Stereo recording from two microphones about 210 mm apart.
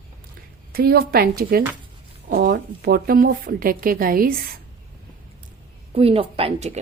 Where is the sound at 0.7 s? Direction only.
45° right (ahead or behind).